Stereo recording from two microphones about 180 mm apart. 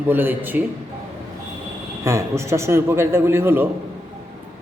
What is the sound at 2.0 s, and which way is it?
A man's voice, 15° right (ahead or behind).